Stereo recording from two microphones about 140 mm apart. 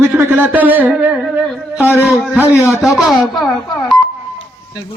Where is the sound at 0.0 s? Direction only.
15° right (ahead or behind); by 3.9 s centre (ahead or behind).